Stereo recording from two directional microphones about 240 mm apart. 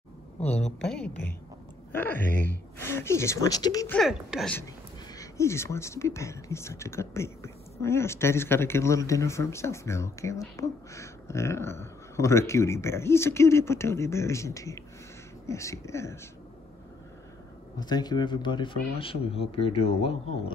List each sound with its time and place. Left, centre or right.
0.7 s speech: centre
4.0 s speech: centre
5.1 s speech: centre
17.7 s speech: centre